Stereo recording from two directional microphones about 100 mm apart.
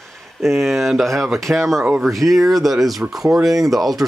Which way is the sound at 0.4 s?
Centre (ahead or behind).